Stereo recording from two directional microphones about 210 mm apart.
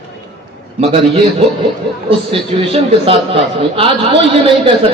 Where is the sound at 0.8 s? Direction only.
25° right (ahead or behind).